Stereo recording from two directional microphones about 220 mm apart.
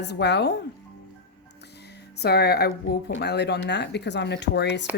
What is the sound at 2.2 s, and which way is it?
Speech, 45° left (ahead or behind).